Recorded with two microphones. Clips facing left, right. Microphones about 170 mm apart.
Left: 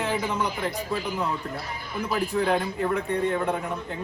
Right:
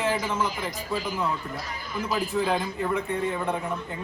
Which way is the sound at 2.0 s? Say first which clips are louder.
Left 1 dB; centre (ahead or behind).